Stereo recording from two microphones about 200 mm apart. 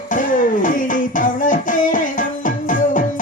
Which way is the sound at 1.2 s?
40° left (ahead or behind).